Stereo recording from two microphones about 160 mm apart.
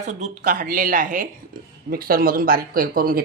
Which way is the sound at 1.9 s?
65° right (ahead or behind).